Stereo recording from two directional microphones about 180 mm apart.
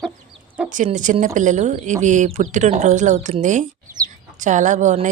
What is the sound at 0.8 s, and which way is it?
Speech, 45° right (ahead or behind).